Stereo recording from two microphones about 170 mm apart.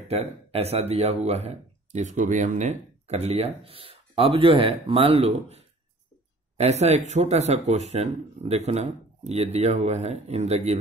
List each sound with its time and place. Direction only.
0.1 s speech: 35° right (ahead or behind)